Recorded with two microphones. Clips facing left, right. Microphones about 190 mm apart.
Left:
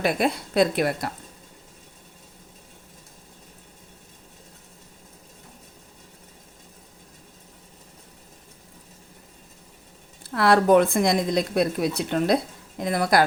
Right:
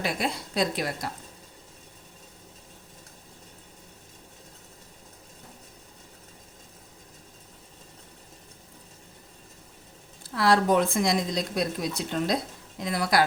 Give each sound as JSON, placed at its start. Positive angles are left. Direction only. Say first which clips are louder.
{"t": 0.0, "sound": "speech", "louder": "left 6 dB", "side_deg": 55}
{"t": 10.3, "sound": "speech", "louder": "left 5 dB", "side_deg": 55}